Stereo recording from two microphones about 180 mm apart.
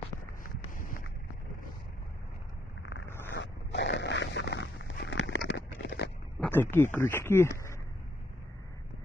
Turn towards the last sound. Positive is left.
turn(degrees=15)  # may be behind; listen again after turning